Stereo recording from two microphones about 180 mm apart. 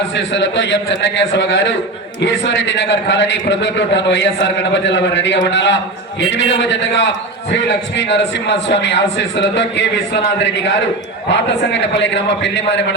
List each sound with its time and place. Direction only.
0.2 s a man's voice: 90° left
11.3 s a man's voice: 85° left